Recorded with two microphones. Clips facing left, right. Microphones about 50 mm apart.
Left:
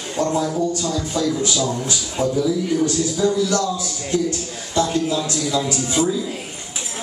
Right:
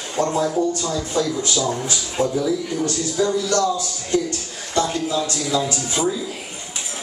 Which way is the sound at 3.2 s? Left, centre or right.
Right.